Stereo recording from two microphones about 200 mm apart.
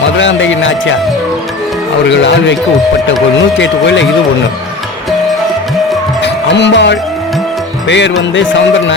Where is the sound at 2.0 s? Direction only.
65° left (ahead or behind).